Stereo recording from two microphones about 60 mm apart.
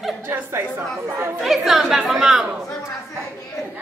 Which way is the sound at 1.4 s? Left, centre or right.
Centre.